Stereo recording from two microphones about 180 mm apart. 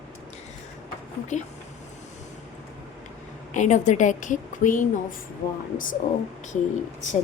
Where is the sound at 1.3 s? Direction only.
40° left (ahead or behind).